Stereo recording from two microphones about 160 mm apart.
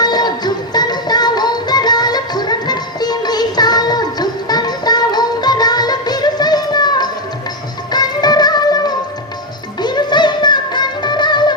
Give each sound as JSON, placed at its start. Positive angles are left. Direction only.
{"t": 0.0, "sound": "music", "side_deg": 25}